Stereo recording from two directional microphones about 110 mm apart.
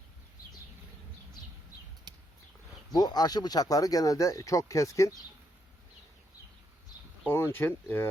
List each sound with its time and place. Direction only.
2.9 s speech: 35° left (ahead or behind)
7.3 s speech: 20° left (ahead or behind)